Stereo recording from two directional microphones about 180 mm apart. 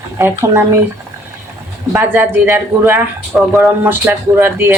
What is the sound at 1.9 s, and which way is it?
Speech, 10° right (ahead or behind).